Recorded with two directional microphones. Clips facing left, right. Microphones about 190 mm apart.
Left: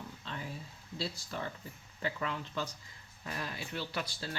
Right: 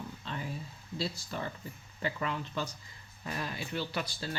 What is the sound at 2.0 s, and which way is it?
Speech, 10° right (ahead or behind).